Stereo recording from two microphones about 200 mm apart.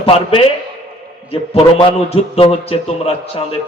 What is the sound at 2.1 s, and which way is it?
A man's voice, 30° left (ahead or behind).